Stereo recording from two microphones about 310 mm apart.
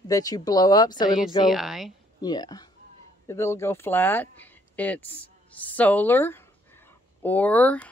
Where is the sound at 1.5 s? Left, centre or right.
Centre.